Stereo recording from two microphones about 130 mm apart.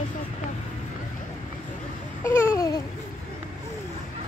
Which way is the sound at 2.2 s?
25° left (ahead or behind).